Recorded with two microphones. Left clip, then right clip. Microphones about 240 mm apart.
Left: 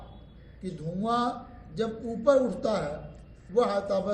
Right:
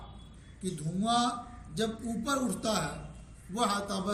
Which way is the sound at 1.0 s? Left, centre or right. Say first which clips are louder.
Left 1 dB; right.